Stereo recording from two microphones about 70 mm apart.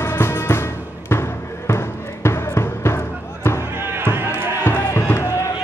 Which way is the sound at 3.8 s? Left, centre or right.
Right.